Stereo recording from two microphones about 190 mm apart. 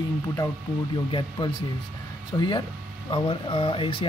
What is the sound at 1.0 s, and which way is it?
Speech, 25° left (ahead or behind).